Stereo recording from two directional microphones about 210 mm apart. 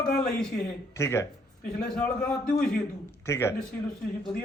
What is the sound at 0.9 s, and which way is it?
A man's voice, 10° left (ahead or behind).